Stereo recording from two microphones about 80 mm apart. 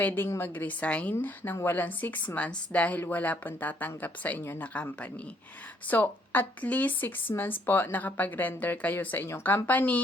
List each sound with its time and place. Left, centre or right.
0.0 s speech: left
5.9 s speech: left